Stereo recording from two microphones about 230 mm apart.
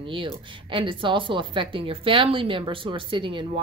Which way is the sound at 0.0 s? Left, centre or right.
Right.